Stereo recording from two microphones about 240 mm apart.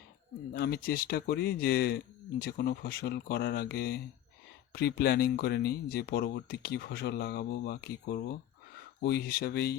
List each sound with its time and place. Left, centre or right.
0.5 s speech: left